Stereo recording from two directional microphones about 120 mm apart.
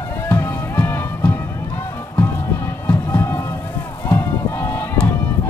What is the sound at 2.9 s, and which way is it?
Music, 20° left (ahead or behind).